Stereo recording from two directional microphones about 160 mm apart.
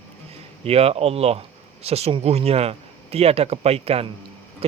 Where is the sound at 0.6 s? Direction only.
40° right (ahead or behind).